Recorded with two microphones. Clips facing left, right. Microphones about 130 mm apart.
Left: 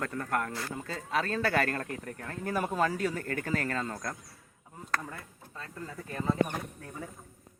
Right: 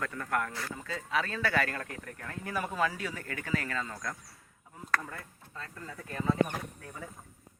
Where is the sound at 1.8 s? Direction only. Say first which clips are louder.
Left 4 dB; 30° left (ahead or behind).